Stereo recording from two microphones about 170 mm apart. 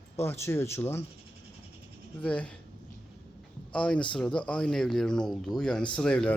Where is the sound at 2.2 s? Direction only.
5° left (ahead or behind).